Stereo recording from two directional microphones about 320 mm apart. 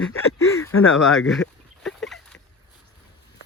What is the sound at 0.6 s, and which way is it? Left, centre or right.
Speech, left.